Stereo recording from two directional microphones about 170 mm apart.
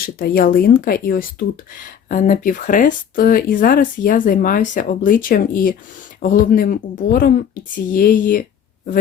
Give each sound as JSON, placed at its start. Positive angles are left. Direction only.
{"t": 0.0, "sound": "speech", "side_deg": 60}